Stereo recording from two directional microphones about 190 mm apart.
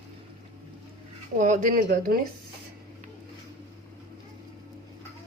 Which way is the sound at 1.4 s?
45° right (ahead or behind).